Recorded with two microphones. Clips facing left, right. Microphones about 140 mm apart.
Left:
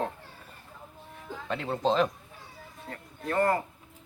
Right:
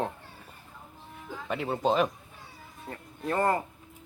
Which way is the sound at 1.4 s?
10° right (ahead or behind).